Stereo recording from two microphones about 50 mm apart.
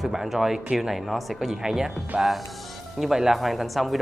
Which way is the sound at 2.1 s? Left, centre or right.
Right.